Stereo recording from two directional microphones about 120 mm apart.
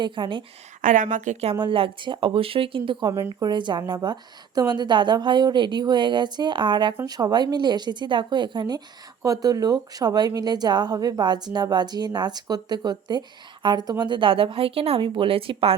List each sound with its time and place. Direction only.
0.0 s speech: 40° right (ahead or behind)
0.8 s a woman's voice: 90° right
1.5 s a woman's voice: 45° right (ahead or behind)